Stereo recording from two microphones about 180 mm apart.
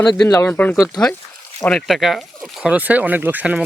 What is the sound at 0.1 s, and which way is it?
Speech, 20° left (ahead or behind).